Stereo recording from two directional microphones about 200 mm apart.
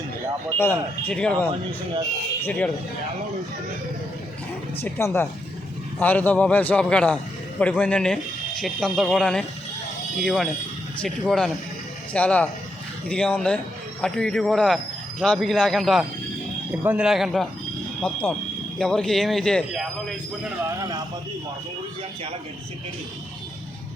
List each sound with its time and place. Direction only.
0.6 s a man's voice: 10° left (ahead or behind)
4.8 s a man's voice: 10° left (ahead or behind)
20.7 s speech: 15° right (ahead or behind)